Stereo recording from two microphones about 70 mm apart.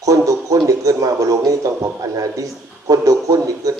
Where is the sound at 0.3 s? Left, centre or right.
Right.